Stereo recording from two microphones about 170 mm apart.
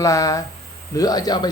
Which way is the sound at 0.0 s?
20° left (ahead or behind).